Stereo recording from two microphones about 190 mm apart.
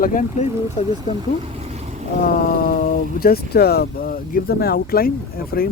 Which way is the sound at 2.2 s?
50° left (ahead or behind).